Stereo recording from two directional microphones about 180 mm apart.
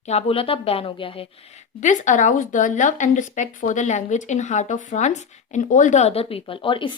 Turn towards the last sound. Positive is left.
turn(degrees=30)  # may be behind; listen again after turning